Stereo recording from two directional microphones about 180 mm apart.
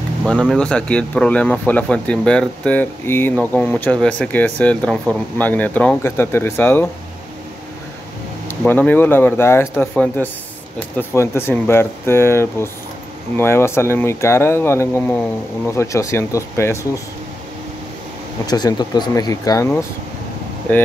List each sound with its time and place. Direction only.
0.2 s speech: centre (ahead or behind)
8.6 s speech: 10° left (ahead or behind)
18.5 s speech: 25° left (ahead or behind)